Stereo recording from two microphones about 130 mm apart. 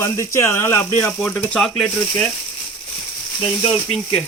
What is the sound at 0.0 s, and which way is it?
Speech, 20° left (ahead or behind).